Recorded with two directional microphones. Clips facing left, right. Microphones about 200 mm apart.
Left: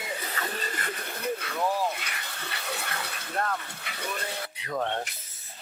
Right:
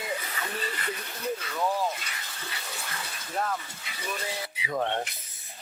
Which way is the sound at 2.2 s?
65° left (ahead or behind).